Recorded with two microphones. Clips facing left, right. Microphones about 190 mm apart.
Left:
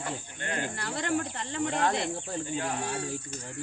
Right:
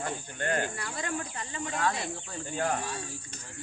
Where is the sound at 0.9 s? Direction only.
70° left (ahead or behind).